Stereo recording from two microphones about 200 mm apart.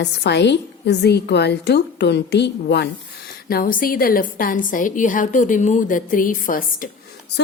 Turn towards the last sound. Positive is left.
turn(degrees=45)  # may be behind; listen again after turning